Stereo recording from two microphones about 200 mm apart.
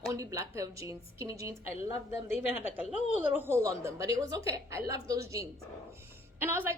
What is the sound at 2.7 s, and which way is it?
Speech, 10° right (ahead or behind).